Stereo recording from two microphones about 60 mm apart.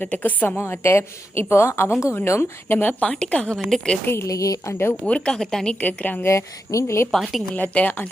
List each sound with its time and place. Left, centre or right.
0.0 s a woman's voice: left
0.6 s a woman's voice: left
2.8 s a woman's voice: left
4.0 s a woman's voice: left
4.3 s a woman's voice: left
5.0 s a woman's voice: centre
5.3 s a woman's voice: centre
5.8 s a woman's voice: left
6.2 s a woman's voice: left
7.1 s a woman's voice: centre
7.5 s a woman's voice: left